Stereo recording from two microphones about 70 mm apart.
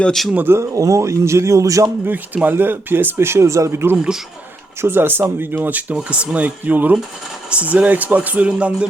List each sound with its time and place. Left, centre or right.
0.1 s speech: centre
0.3 s speech: right
0.6 s speech: right
2.0 s speech: right
3.7 s speech: right
3.9 s a man's voice: centre
4.8 s speech: right; by 8.9 s centre